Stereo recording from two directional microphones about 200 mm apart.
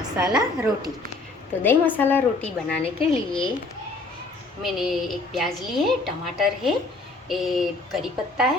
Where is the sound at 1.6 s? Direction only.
10° left (ahead or behind).